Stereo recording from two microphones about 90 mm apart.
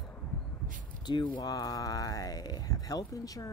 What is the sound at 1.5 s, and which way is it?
Speech, 40° left (ahead or behind).